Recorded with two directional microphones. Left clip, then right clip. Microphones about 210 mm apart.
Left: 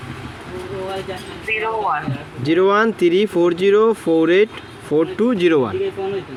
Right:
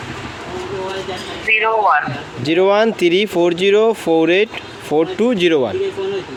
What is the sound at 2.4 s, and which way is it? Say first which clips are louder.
Speech: right 2 dB; 10° left (ahead or behind).